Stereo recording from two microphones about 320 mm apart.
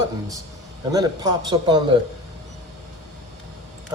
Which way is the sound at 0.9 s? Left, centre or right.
Centre.